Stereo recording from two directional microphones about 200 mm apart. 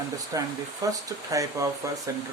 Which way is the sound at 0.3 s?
15° right (ahead or behind).